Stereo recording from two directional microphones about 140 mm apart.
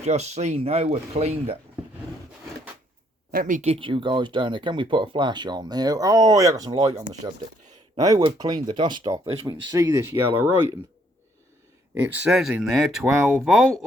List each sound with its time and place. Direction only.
0.0 s speech: 50° right (ahead or behind)
3.3 s speech: 70° right (ahead or behind)
3.7 s speech: 40° right (ahead or behind)
7.7 s a sound: 25° right (ahead or behind)
8.4 s speech: 30° right (ahead or behind)
9.8 s speech: 15° right (ahead or behind)
11.9 s speech: 10° right (ahead or behind)